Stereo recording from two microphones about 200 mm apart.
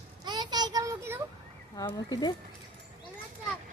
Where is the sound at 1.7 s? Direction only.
20° left (ahead or behind).